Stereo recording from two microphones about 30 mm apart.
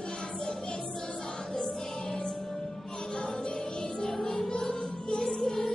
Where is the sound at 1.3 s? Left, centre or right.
Left.